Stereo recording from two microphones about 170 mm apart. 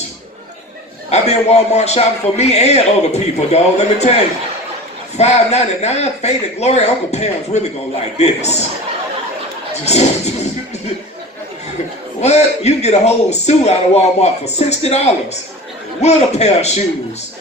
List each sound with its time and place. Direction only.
1.1 s a man's voice: 40° left (ahead or behind)
5.1 s a man's voice: 40° left (ahead or behind)
9.8 s a man's voice: 40° left (ahead or behind)
12.2 s a man's voice: 40° left (ahead or behind)